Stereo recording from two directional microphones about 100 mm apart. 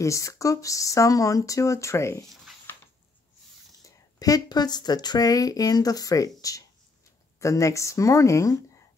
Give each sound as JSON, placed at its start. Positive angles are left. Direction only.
{"t": 0.0, "sound": "speech", "side_deg": 30}
{"t": 2.7, "sound": "a sound", "side_deg": 20}
{"t": 3.8, "sound": "speech", "side_deg": 35}